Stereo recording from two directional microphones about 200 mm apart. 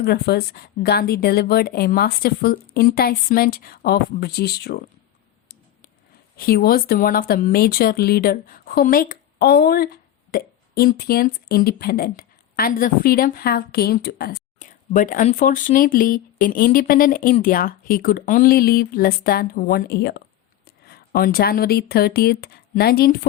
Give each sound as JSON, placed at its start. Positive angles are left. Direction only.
{"t": 0.0, "sound": "speech", "side_deg": 55}
{"t": 6.3, "sound": "speech", "side_deg": 50}